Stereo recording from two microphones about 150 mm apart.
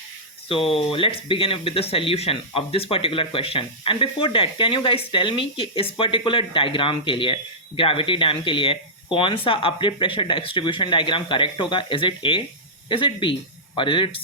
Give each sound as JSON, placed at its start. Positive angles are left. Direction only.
{"t": 0.4, "sound": "speech", "side_deg": 40}